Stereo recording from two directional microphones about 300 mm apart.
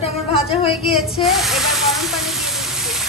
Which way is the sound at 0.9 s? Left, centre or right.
Centre.